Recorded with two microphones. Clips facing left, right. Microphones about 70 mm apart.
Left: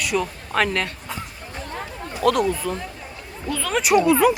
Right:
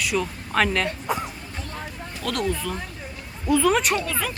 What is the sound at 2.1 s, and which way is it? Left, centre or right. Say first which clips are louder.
Speech: left 7 dB; centre.